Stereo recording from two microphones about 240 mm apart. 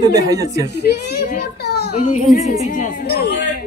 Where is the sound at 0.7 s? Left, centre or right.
Left.